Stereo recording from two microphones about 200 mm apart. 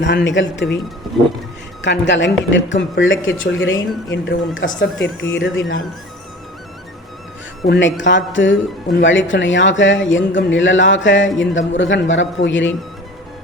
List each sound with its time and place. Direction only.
0.0 s speech: 65° left (ahead or behind)
1.8 s speech: 65° left (ahead or behind)
7.7 s speech: 65° left (ahead or behind)